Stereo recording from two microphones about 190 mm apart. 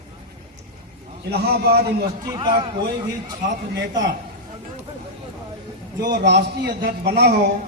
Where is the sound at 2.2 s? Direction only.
20° right (ahead or behind).